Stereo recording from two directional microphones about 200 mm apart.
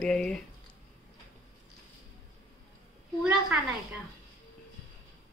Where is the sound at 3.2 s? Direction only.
5° right (ahead or behind).